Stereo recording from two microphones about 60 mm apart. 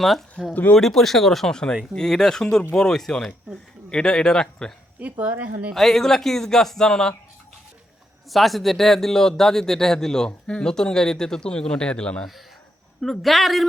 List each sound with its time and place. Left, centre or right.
0.0 s speech: centre
4.9 s speech: right
5.7 s speech: centre
8.3 s speech: centre
13.0 s speech: centre